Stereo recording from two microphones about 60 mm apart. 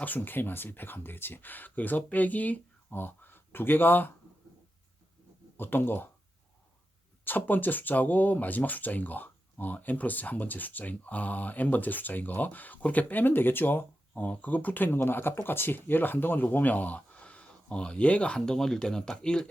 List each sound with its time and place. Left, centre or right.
0.0 s speech: left
5.5 s speech: left
7.3 s speech: left; by 19.5 s centre